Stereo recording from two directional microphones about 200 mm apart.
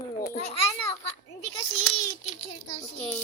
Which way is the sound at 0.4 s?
30° left (ahead or behind).